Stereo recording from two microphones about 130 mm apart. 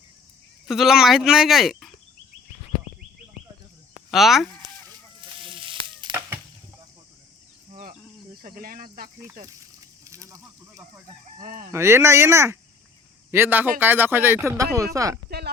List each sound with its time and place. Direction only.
0.7 s speech: 5° right (ahead or behind)
4.1 s speech: centre (ahead or behind)
5.4 s sizzle: 40° right (ahead or behind)
7.7 s insect: 70° right (ahead or behind)
8.4 s speech: 90° right
10.0 s speech: 25° right (ahead or behind)
11.4 s speech: 90° right
11.7 s speech: 20° right (ahead or behind)